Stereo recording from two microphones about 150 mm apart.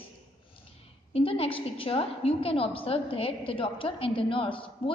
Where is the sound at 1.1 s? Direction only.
40° left (ahead or behind).